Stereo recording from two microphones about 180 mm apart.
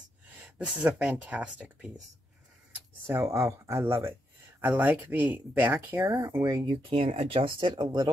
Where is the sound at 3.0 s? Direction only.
15° right (ahead or behind).